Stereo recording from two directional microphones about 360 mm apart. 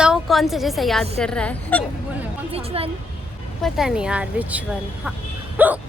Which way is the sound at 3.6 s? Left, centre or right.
Centre.